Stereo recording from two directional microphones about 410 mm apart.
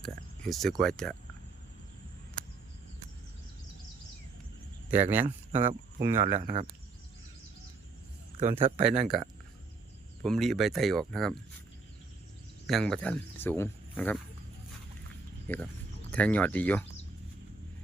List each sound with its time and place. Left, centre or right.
0.0 s speech: centre
5.1 s speech: centre
6.4 s speech: centre
8.4 s speech: centre
8.9 s speech: centre
12.6 s speech: centre
15.5 s speech: centre